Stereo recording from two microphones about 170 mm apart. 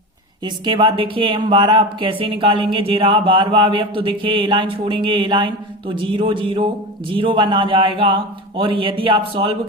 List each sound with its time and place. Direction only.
0.4 s speech: 30° right (ahead or behind)